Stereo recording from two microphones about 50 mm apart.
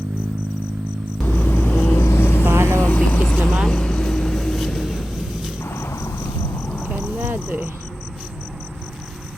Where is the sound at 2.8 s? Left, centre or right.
Left.